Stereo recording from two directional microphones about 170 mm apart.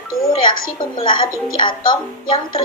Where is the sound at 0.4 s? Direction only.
25° left (ahead or behind).